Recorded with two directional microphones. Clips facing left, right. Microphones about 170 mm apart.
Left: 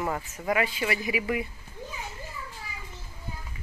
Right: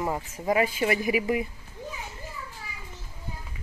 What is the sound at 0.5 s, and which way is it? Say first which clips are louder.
Speech: right 4 dB; 40° right (ahead or behind).